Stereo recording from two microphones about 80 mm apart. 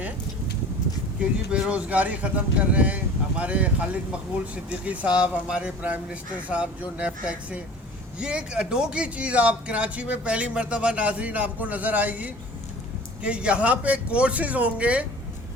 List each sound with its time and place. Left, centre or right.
1.2 s speech: centre